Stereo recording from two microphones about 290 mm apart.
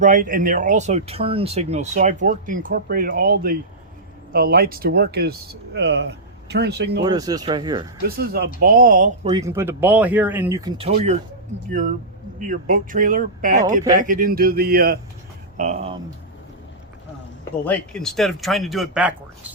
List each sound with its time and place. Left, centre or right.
0.0 s speech: right
7.0 s speech: centre
8.0 s speech: right
9.3 s speech: centre
12.4 s speech: right
17.7 s speech: centre